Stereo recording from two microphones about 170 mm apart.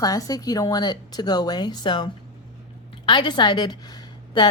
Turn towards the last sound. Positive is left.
turn(degrees=25)  # may be behind; listen again after turning